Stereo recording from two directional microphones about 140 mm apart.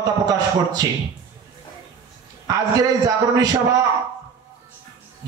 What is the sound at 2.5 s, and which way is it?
A man's voice, 25° right (ahead or behind).